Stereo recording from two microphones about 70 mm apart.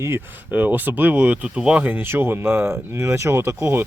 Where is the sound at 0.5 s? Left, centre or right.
Right.